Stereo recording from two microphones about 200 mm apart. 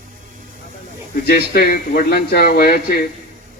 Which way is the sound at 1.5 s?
50° left (ahead or behind).